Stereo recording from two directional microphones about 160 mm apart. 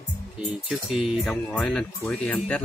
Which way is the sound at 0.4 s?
5° right (ahead or behind).